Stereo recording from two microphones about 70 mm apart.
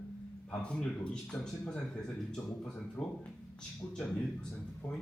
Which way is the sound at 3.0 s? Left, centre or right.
Centre.